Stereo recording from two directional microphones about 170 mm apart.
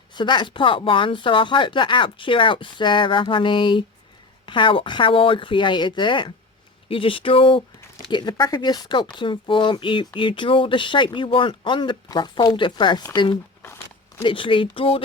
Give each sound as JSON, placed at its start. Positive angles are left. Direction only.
{"t": 0.1, "sound": "speech", "side_deg": 25}
{"t": 13.3, "sound": "speech", "side_deg": 15}
{"t": 14.2, "sound": "speech", "side_deg": 30}